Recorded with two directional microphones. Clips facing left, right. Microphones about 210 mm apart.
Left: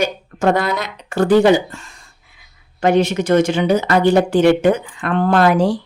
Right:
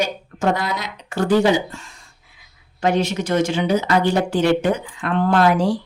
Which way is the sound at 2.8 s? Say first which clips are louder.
Left 5 dB; 55° left (ahead or behind).